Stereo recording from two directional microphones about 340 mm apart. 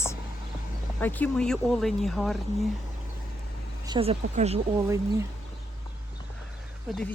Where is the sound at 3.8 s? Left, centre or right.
Centre.